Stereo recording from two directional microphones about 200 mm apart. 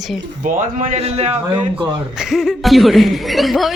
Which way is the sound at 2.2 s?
Centre (ahead or behind).